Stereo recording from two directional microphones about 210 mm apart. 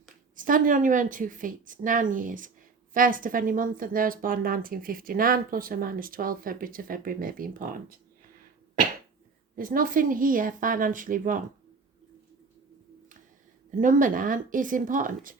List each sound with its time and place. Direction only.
0.3 s a woman's voice: 40° right (ahead or behind)
9.6 s a woman's voice: 40° right (ahead or behind)
13.7 s a woman's voice: 40° right (ahead or behind)